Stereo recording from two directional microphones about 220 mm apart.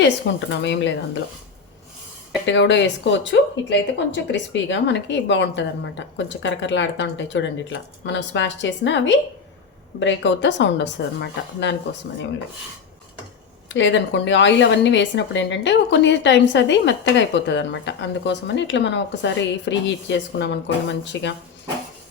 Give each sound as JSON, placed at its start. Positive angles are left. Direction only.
{"t": 0.3, "sound": "a woman's voice", "side_deg": 50}
{"t": 2.5, "sound": "speech", "side_deg": 55}
{"t": 13.7, "sound": "a woman's voice", "side_deg": 55}